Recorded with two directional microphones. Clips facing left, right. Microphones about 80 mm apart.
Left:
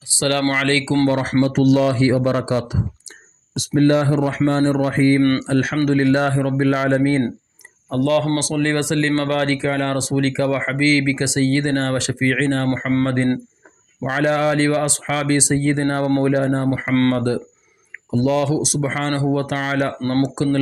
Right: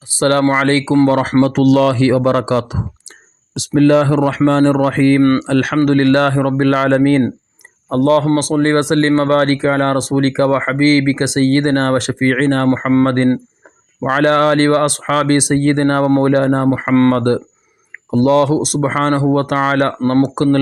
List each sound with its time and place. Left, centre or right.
0.2 s speech: right
1.0 s a man's voice: right
1.5 s speech: right
4.4 s a man's voice: right
5.8 s a man's voice: right
7.9 s speech: right
12.6 s speech: right
13.1 s speech: right
17.2 s speech: right